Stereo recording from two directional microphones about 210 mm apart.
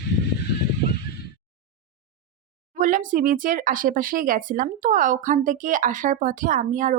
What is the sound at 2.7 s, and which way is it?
Speech, 40° right (ahead or behind).